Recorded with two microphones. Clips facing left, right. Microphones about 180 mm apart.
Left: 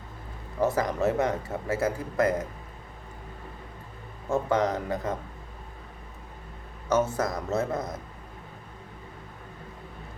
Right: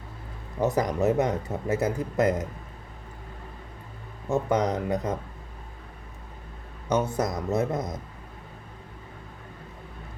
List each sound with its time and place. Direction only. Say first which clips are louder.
0.6 s speech: right 1 dB; 20° right (ahead or behind)
4.3 s speech: right 1 dB; 15° right (ahead or behind)
6.8 s speech: even; 15° right (ahead or behind)